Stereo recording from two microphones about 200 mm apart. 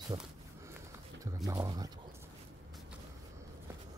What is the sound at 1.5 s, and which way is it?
Speech, 20° right (ahead or behind).